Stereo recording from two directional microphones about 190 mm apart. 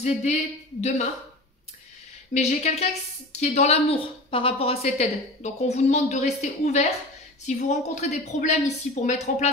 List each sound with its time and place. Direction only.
0.0 s a woman's voice: 35° left (ahead or behind)
2.3 s a woman's voice: 35° left (ahead or behind)